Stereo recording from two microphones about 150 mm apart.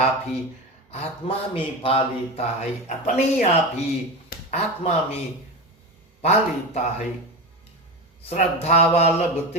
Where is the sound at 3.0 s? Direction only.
50° left (ahead or behind).